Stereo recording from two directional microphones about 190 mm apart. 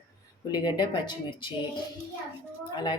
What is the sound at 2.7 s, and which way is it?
Speech, 25° left (ahead or behind).